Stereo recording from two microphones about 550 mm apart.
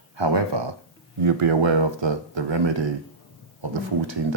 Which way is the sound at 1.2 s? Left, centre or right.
Right.